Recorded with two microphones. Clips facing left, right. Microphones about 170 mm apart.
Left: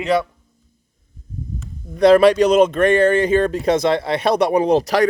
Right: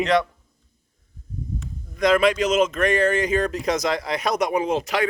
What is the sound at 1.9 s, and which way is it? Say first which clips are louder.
Speech: left 7 dB; 35° left (ahead or behind).